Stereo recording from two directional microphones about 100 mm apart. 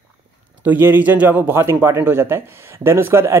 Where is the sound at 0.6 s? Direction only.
20° right (ahead or behind).